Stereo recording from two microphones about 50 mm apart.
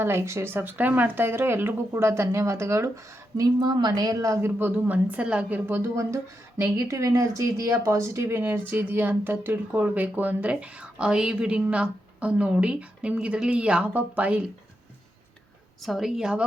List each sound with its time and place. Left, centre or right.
0.0 s speech: right
4.2 s a woman's voice: right
5.2 s a woman's voice: right
5.6 s a woman's voice: right
6.6 s speech: right
7.9 s a woman's voice: right
15.8 s a woman's voice: centre